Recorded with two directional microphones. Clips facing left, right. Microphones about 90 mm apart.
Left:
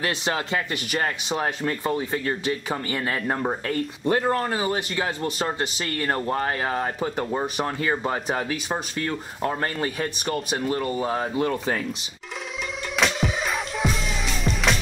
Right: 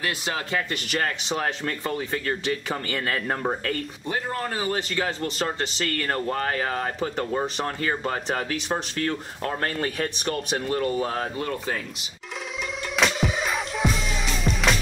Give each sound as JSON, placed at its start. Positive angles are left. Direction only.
{"t": 0.0, "sound": "speech", "side_deg": 30}
{"t": 4.1, "sound": "speech", "side_deg": 40}
{"t": 4.5, "sound": "speech", "side_deg": 25}
{"t": 7.2, "sound": "speech", "side_deg": 10}
{"t": 11.3, "sound": "speech", "side_deg": 20}
{"t": 12.9, "sound": "music", "side_deg": 0}